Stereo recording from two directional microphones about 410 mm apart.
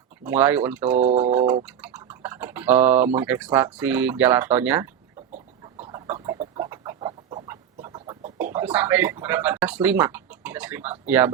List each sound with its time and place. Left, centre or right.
0.3 s speech: centre
0.9 s speech: centre
1.4 s a sound: centre
3.2 s speech: centre
5.8 s chicken: centre